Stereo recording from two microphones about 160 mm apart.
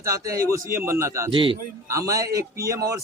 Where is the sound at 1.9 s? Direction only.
20° right (ahead or behind).